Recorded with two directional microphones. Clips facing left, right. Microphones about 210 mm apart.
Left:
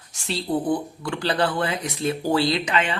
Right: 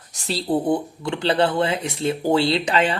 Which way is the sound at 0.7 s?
25° right (ahead or behind).